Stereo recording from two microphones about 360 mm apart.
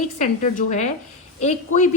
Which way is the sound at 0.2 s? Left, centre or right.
Left.